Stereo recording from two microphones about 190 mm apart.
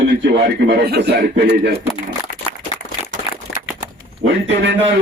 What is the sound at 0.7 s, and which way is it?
Speech, 60° right (ahead or behind).